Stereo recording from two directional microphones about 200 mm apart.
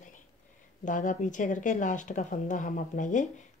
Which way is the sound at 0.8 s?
40° left (ahead or behind).